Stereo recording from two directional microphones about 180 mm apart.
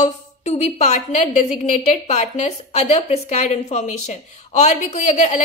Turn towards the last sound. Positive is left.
turn(degrees=40)  # may be behind; listen again after turning